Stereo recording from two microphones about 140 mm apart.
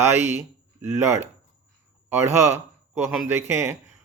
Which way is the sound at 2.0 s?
20° right (ahead or behind).